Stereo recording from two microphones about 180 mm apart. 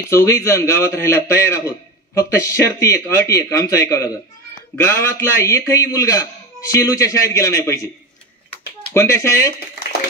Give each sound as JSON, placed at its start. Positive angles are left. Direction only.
{"t": 0.1, "sound": "a man's voice", "side_deg": 15}
{"t": 8.9, "sound": "a man's voice", "side_deg": 15}